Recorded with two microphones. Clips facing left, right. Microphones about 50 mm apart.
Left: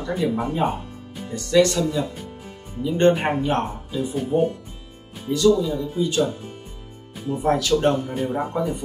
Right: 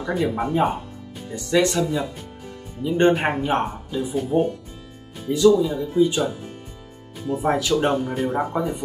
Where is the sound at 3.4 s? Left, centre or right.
Centre.